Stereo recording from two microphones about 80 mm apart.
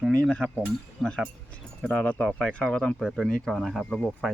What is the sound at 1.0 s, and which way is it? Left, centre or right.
Speech, centre.